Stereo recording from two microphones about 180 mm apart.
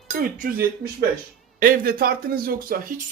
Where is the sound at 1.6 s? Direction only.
50° right (ahead or behind).